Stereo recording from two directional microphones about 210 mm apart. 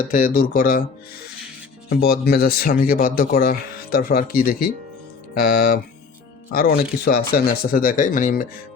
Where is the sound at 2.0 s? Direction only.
50° left (ahead or behind).